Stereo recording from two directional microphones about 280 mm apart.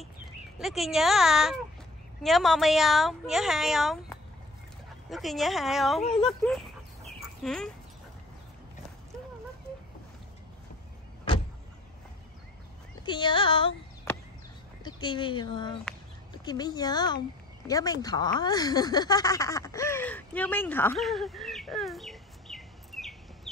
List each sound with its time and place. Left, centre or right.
0.6 s a woman's voice: centre
6.0 s speech: centre
6.4 s a woman's voice: centre
13.0 s speech: centre
14.8 s speech: centre